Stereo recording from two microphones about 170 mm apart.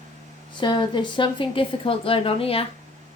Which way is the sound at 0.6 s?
25° left (ahead or behind).